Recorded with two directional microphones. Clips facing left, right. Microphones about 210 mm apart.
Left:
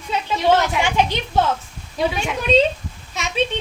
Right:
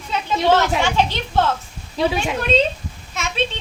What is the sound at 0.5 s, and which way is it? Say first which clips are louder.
Speech: right 1 dB; 15° left (ahead or behind).